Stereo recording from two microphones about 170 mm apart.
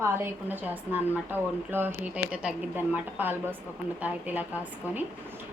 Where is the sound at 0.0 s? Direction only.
15° right (ahead or behind).